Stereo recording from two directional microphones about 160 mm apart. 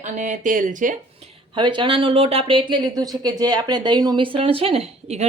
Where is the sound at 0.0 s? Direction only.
50° right (ahead or behind).